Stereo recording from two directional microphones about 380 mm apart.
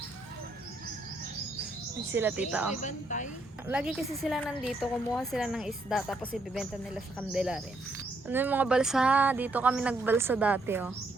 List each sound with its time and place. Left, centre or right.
2.1 s a woman's voice: centre
2.8 s speech: centre
3.7 s a woman's voice: centre